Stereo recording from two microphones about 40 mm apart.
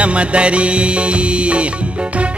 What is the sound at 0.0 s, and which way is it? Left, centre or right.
Music, right.